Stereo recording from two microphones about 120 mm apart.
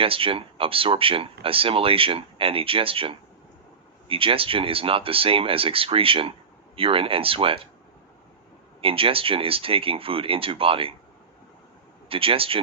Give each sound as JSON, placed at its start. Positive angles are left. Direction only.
{"t": 0.0, "sound": "speech", "side_deg": -50}
{"t": 8.8, "sound": "speech", "side_deg": -50}
{"t": 12.0, "sound": "speech", "side_deg": -50}